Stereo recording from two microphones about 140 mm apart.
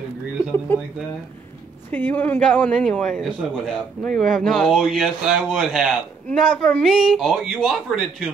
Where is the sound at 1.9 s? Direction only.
15° left (ahead or behind).